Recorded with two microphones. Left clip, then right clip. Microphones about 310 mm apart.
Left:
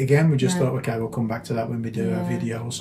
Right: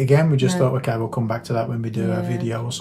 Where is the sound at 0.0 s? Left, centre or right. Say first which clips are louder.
Right 2 dB; centre.